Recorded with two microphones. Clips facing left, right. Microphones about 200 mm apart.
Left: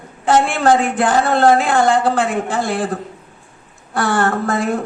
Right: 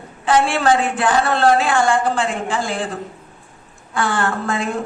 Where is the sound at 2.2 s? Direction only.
55° left (ahead or behind).